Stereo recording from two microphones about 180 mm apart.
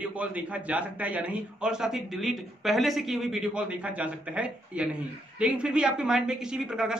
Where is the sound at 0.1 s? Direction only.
10° right (ahead or behind).